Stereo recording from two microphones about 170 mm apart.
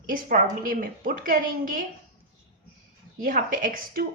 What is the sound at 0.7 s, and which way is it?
Speech, 55° right (ahead or behind).